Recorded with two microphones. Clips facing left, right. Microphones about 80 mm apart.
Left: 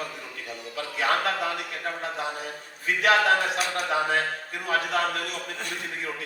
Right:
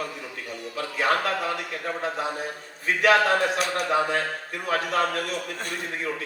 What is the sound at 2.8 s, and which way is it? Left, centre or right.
Speech, right.